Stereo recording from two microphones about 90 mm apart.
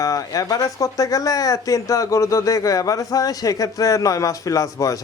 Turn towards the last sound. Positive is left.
turn(degrees=40)  # may be behind; listen again after turning